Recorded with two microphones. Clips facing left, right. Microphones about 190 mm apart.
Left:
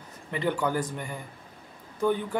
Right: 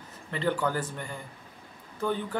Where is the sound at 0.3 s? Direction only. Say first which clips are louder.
Left 1 dB; 15° left (ahead or behind).